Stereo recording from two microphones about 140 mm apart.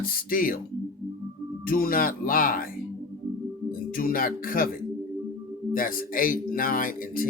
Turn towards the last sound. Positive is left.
turn(degrees=85)